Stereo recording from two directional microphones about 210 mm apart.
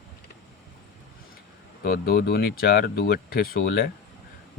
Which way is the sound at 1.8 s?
45° left (ahead or behind).